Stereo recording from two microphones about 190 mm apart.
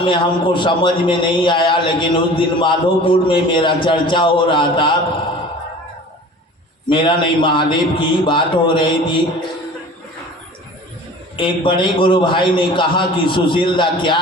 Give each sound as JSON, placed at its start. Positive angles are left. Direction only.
{"t": 0.0, "sound": "a man's voice", "side_deg": 25}
{"t": 6.9, "sound": "a man's voice", "side_deg": 25}
{"t": 11.3, "sound": "a man's voice", "side_deg": 25}